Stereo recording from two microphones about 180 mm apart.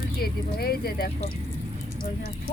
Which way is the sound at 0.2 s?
60° left (ahead or behind).